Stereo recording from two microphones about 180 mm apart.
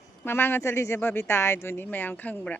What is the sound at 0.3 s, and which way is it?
Speech, 10° left (ahead or behind).